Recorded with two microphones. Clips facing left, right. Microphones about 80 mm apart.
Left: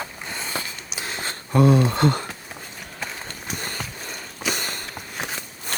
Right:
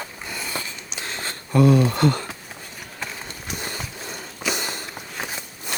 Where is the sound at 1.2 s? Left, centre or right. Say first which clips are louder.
Right 1 dB; left.